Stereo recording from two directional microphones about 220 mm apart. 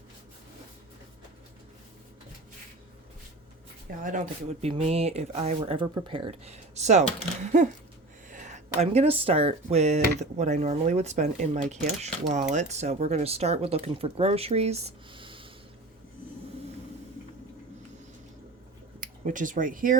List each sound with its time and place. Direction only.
4.0 s speech: 35° right (ahead or behind)
18.9 s speech: 35° right (ahead or behind)